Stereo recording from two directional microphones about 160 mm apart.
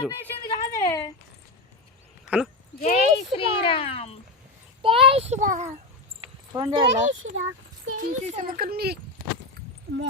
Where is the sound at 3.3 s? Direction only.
35° left (ahead or behind).